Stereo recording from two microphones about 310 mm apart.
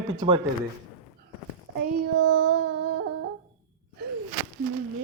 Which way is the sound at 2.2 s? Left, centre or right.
Right.